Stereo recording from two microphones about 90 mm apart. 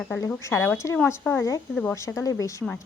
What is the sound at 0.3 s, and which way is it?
Speech, 30° left (ahead or behind).